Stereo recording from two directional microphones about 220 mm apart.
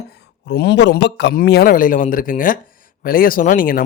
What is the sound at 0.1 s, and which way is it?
A man's voice, 50° left (ahead or behind).